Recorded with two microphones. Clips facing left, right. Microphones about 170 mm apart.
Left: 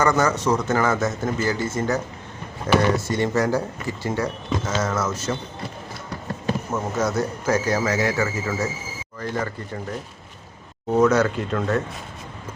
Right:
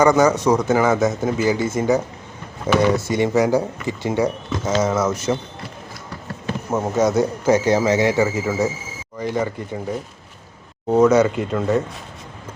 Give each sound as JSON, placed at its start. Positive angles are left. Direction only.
{"t": 0.0, "sound": "speech", "side_deg": -15}
{"t": 7.0, "sound": "speech", "side_deg": -15}
{"t": 10.9, "sound": "speech", "side_deg": -10}